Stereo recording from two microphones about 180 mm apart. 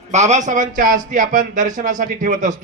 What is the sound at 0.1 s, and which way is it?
A man's voice, 40° right (ahead or behind).